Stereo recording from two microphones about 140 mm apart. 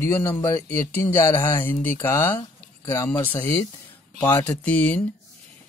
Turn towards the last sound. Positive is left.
turn(degrees=10)  # may be behind; listen again after turning